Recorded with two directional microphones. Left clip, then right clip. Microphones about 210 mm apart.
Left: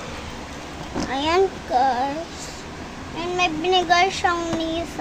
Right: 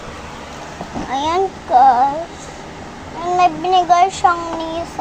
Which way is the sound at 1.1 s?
Centre (ahead or behind).